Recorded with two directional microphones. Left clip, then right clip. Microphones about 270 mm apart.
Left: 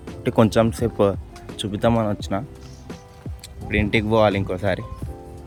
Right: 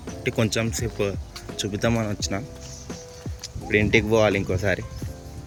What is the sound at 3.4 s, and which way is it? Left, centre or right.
Speech, centre.